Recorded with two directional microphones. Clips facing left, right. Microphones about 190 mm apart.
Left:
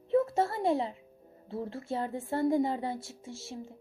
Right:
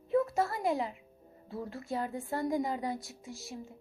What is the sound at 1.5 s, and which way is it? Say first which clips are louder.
A woman's voice: left 3 dB; 25° left (ahead or behind).